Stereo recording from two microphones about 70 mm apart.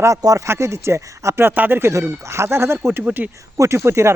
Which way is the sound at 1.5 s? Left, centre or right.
Right.